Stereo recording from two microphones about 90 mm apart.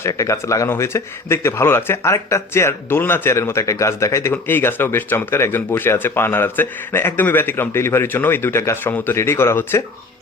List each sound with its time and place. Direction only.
0.1 s speech: 35° left (ahead or behind)